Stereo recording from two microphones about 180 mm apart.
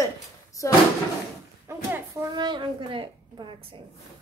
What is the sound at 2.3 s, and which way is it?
Speech, 25° right (ahead or behind).